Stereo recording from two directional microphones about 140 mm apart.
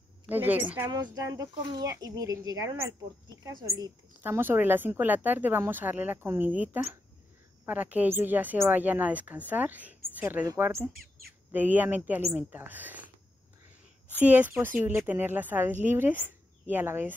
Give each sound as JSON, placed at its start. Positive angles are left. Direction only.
{"t": 0.3, "sound": "a woman's voice", "side_deg": -15}
{"t": 4.2, "sound": "a woman's voice", "side_deg": -15}
{"t": 14.1, "sound": "a woman's voice", "side_deg": -10}